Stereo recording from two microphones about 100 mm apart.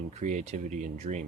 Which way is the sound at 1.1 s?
80° right.